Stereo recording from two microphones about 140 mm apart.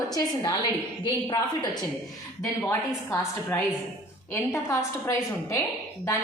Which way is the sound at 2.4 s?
20° left (ahead or behind).